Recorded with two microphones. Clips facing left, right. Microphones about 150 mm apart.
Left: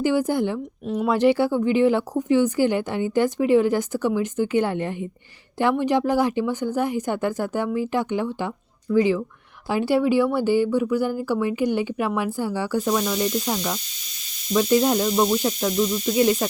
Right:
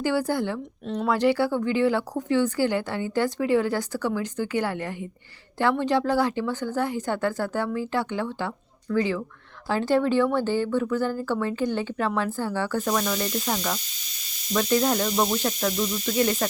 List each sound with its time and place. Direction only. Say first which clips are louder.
0.0 s speech: left 4 dB; 20° left (ahead or behind)
15.1 s speech: left 4 dB; 5° left (ahead or behind)
15.4 s speech: left 4 dB; 15° left (ahead or behind)